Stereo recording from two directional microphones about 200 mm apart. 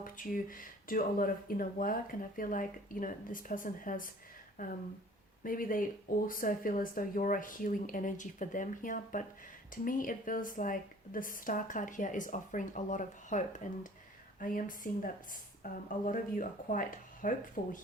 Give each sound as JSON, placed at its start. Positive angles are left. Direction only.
{"t": 0.0, "sound": "a woman's voice", "side_deg": 45}